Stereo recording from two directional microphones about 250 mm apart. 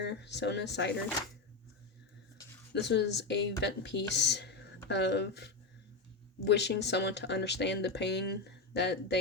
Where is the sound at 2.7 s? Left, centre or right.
Left.